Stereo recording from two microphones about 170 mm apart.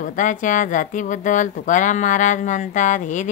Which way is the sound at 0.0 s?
50° left (ahead or behind).